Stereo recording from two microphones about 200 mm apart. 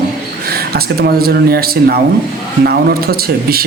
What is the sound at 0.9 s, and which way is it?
A man's voice, 50° right (ahead or behind).